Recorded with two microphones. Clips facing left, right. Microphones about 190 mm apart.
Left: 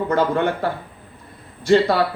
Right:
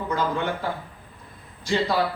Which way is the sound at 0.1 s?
60° left (ahead or behind).